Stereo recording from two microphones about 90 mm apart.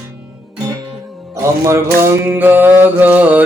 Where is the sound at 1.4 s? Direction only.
35° right (ahead or behind).